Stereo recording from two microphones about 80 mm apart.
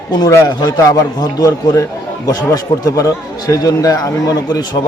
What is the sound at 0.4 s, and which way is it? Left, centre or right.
A man's voice, left.